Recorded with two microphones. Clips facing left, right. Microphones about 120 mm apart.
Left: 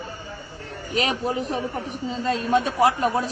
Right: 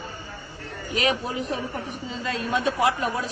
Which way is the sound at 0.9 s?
40° left (ahead or behind).